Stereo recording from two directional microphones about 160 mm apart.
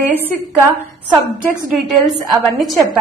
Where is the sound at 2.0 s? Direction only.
Centre (ahead or behind).